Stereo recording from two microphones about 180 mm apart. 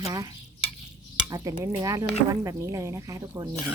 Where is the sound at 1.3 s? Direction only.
20° right (ahead or behind).